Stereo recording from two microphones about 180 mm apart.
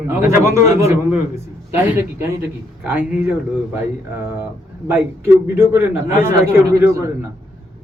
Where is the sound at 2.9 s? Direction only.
10° right (ahead or behind).